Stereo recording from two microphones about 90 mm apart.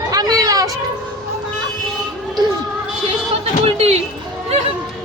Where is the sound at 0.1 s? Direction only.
45° right (ahead or behind).